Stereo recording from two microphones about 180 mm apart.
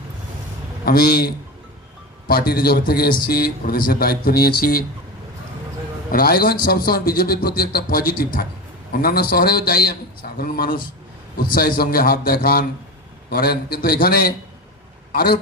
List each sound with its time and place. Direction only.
0.9 s a man's voice: 55° left (ahead or behind)
6.1 s a man's voice: 55° left (ahead or behind)